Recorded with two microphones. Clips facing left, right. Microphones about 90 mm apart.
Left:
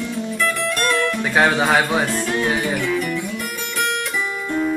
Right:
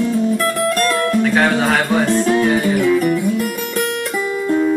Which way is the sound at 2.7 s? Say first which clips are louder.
Right 7 dB; 40° right (ahead or behind).